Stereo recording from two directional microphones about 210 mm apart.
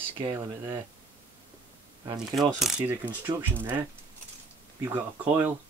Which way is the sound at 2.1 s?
Centre (ahead or behind).